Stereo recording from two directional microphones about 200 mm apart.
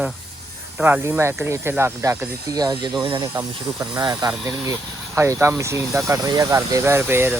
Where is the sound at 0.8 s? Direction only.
5° right (ahead or behind).